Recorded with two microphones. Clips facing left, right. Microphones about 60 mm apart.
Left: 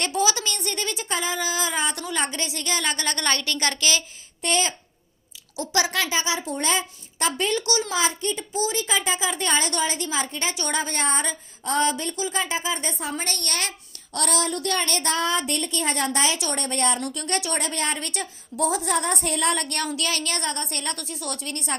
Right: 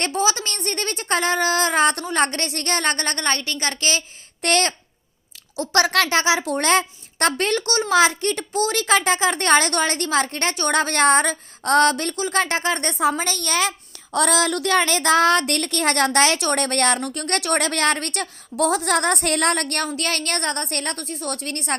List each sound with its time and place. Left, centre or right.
0.0 s speech: right
3.2 s a woman's voice: right
4.4 s speech: right
5.5 s a woman's voice: right
7.6 s speech: right
7.9 s speech: right
9.7 s a woman's voice: right
10.8 s speech: right
17.0 s a woman's voice: right
17.6 s a woman's voice: right